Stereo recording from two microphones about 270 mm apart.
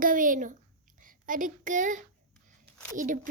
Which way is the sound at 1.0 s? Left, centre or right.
Right.